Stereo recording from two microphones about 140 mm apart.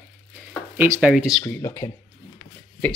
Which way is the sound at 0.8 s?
15° right (ahead or behind).